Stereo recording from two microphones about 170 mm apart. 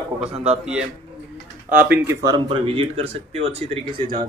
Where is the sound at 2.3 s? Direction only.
30° right (ahead or behind).